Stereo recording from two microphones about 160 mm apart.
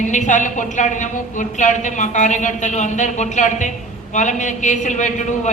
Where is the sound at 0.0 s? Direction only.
50° left (ahead or behind).